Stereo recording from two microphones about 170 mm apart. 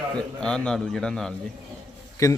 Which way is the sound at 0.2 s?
5° left (ahead or behind).